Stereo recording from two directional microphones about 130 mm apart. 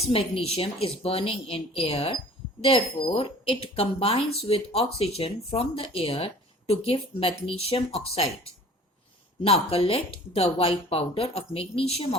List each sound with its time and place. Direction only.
0.0 s speech: 45° left (ahead or behind)